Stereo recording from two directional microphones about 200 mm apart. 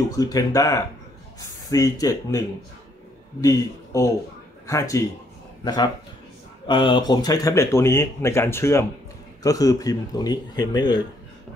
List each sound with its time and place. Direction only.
0.1 s speech: 15° left (ahead or behind)